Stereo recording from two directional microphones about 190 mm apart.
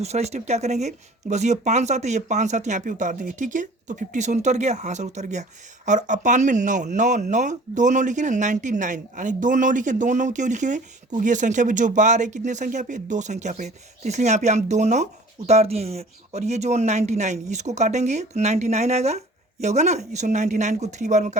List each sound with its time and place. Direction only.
0.0 s speech: 35° right (ahead or behind)